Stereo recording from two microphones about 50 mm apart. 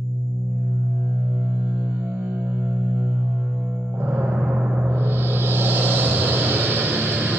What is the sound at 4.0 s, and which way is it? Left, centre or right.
Music, right.